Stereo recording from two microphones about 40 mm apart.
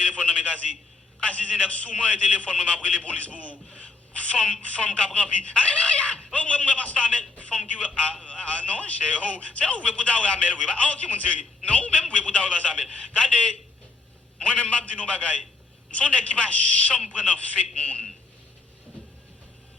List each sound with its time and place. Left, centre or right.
0.0 s a man's voice: left
14.4 s a man's voice: left